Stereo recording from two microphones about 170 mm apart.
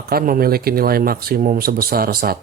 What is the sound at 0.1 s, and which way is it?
Speech, 60° right (ahead or behind).